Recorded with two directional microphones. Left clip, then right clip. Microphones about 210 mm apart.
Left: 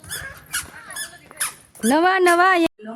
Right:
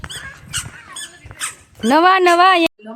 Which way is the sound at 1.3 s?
50° right (ahead or behind).